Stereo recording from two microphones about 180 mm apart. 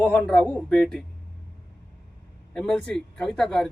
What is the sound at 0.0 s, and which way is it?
A man's voice, 10° left (ahead or behind).